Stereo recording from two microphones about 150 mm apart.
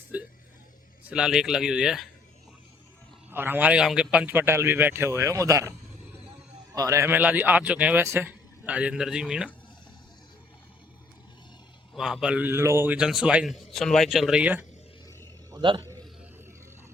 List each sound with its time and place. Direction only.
0.1 s speech: 10° right (ahead or behind)
3.2 s a man's voice: 15° right (ahead or behind)
6.7 s a man's voice: 20° right (ahead or behind); by 9.5 s 5° right (ahead or behind)
11.9 s a man's voice: 5° right (ahead or behind)
15.5 s a sound: 30° right (ahead or behind)